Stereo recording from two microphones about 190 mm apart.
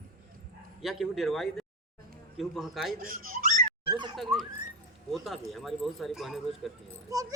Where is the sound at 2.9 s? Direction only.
45° right (ahead or behind).